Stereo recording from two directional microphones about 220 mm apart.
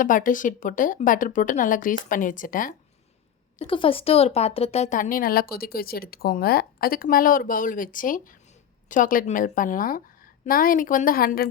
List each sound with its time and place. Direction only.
0.0 s a woman's voice: 35° left (ahead or behind)
3.6 s a woman's voice: 25° left (ahead or behind); by 11.4 s 40° left (ahead or behind)